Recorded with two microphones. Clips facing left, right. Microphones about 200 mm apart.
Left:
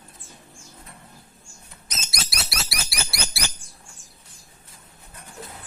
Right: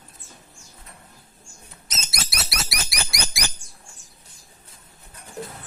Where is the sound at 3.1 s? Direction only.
15° right (ahead or behind).